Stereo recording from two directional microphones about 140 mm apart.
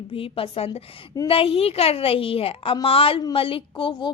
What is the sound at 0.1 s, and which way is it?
A woman's voice, 40° left (ahead or behind).